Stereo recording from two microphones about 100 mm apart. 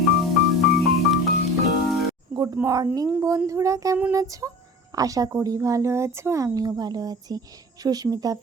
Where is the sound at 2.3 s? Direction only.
40° right (ahead or behind).